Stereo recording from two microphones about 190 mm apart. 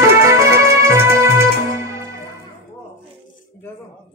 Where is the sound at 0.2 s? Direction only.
15° right (ahead or behind).